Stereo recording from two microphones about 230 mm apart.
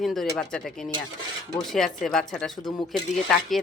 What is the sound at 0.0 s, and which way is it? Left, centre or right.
A woman's voice, centre.